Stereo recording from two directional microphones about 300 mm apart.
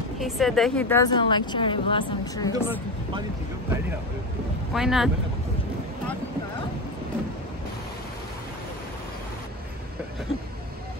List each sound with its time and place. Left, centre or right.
0.2 s a woman's voice: centre
2.5 s speech: centre
4.7 s speech: centre